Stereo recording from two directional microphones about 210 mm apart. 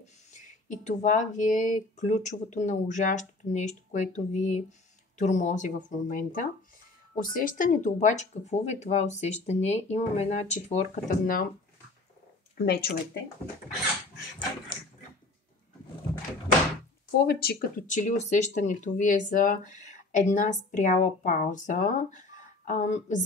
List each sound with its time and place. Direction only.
0.0 s speech: 35° left (ahead or behind)
12.5 s speech: 50° left (ahead or behind)
17.3 s speech: 45° left (ahead or behind)